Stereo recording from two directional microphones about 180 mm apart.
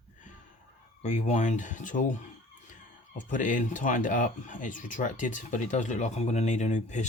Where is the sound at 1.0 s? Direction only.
40° left (ahead or behind).